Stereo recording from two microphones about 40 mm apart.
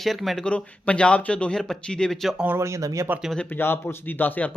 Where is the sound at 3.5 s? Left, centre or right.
Left.